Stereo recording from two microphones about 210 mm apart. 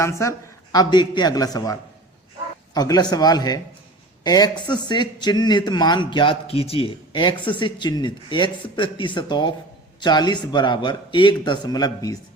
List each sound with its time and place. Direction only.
0.0 s speech: 15° left (ahead or behind)